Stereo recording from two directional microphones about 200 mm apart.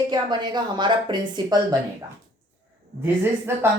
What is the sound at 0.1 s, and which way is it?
A woman's voice, 20° right (ahead or behind).